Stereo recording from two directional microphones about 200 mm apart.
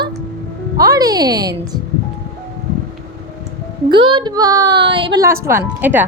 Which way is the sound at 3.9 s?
25° right (ahead or behind).